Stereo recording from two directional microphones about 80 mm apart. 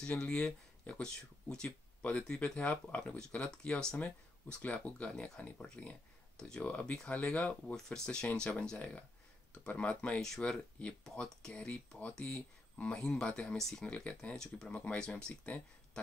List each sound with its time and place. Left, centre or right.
0.0 s speech: centre
13.9 s speech: centre
14.7 s speech: centre